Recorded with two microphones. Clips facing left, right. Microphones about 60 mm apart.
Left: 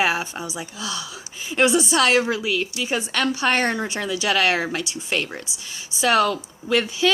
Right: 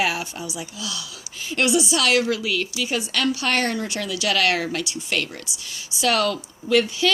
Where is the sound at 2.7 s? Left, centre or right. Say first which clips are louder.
Left 1 dB; left.